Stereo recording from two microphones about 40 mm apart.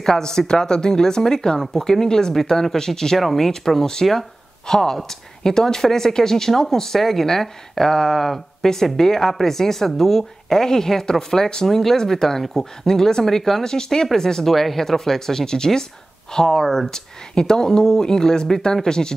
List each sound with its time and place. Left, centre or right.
0.0 s speech: centre
16.6 s speech: centre
16.9 s speech: centre